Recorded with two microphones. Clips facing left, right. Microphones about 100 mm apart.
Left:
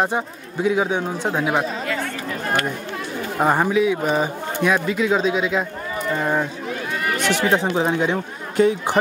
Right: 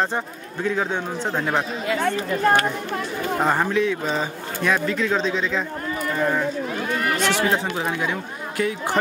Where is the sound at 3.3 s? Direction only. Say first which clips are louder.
Left 3 dB; 15° left (ahead or behind).